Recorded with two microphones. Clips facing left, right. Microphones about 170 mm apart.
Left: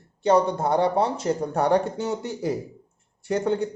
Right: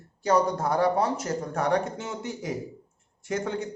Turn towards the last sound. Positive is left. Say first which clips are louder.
# left 5 dB
turn(degrees=35)  # may be behind; listen again after turning